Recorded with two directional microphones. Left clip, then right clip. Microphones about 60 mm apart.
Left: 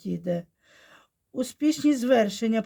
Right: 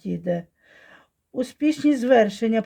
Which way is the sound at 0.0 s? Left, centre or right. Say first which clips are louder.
Right 3 dB; right.